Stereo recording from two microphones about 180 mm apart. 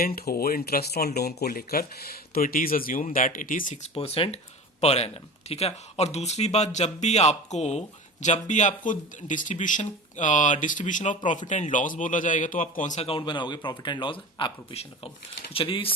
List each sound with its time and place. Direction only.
0.0 s speech: 55° left (ahead or behind)
3.9 s speech: 30° left (ahead or behind)